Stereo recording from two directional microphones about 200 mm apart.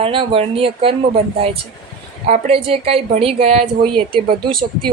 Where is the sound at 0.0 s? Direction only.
25° right (ahead or behind).